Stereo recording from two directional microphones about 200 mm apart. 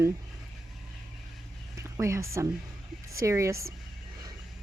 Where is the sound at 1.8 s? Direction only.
15° right (ahead or behind).